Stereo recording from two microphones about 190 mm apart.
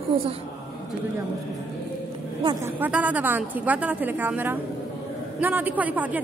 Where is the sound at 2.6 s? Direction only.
10° right (ahead or behind).